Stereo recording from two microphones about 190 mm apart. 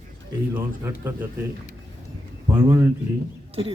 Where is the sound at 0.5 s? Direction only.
10° right (ahead or behind).